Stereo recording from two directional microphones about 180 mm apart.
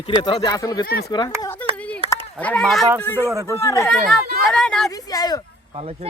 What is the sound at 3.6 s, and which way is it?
Speech, 15° left (ahead or behind).